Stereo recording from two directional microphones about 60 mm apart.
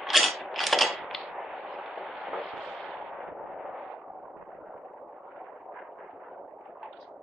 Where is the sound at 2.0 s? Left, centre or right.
Right.